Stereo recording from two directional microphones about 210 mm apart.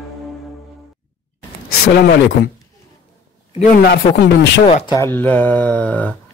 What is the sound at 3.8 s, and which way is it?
Speech, 50° left (ahead or behind).